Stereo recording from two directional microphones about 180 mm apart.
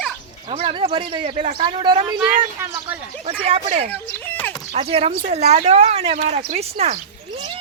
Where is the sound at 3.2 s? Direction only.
30° right (ahead or behind).